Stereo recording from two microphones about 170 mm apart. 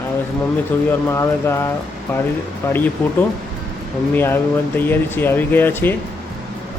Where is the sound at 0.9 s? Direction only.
15° left (ahead or behind).